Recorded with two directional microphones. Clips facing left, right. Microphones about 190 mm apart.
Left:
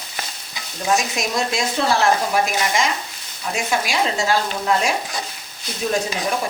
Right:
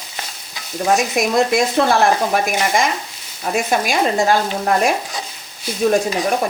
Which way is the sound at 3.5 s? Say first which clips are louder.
Right 4 dB; 55° right (ahead or behind).